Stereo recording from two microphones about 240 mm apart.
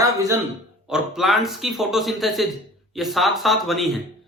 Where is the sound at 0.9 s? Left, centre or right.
Centre.